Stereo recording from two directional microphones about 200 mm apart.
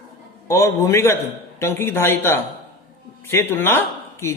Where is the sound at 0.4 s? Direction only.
15° left (ahead or behind).